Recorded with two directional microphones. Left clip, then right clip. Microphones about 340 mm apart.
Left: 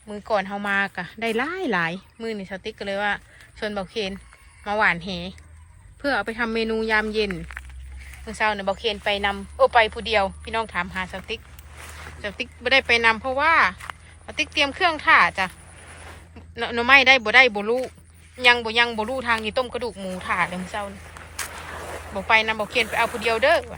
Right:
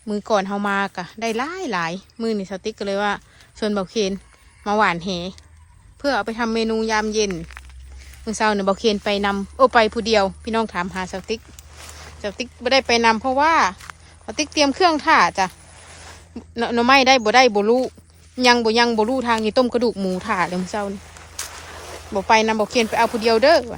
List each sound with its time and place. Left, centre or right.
0.1 s speech: centre
7.6 s a sound: right
8.3 s speech: centre
16.6 s speech: centre
21.8 s speech: centre